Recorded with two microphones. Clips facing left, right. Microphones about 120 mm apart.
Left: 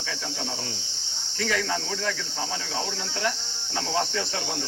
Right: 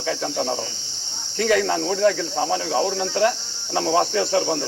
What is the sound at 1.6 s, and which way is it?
Speech, 40° right (ahead or behind).